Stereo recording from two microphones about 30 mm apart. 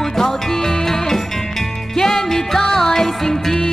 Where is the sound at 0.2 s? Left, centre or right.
Centre.